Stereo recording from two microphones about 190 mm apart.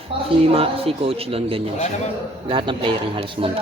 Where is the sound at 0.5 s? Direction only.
30° right (ahead or behind).